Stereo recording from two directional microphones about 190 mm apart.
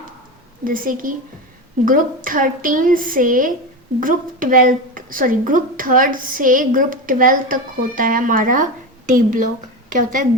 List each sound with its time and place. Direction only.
0.6 s a woman's voice: 45° right (ahead or behind)